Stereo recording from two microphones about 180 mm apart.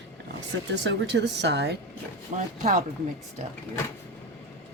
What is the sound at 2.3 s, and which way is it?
Speech, 45° right (ahead or behind).